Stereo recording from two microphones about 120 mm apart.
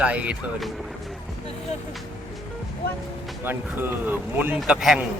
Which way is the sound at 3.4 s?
15° right (ahead or behind).